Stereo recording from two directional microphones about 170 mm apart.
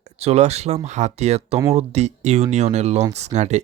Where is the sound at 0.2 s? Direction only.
40° right (ahead or behind).